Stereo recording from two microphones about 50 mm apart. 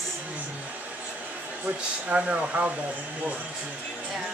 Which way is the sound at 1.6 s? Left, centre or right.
Right.